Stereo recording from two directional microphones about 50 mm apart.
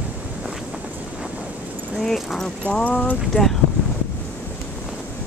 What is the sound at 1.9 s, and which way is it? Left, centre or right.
Speech, centre.